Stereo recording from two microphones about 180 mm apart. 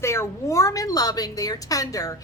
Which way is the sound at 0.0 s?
15° left (ahead or behind).